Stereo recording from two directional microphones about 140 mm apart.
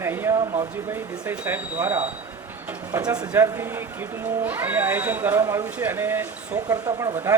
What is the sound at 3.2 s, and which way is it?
Speech, 15° right (ahead or behind).